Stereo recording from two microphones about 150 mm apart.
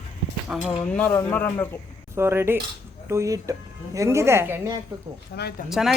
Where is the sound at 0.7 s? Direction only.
5° left (ahead or behind).